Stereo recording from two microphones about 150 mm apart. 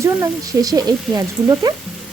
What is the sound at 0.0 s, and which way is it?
Speech, 20° right (ahead or behind).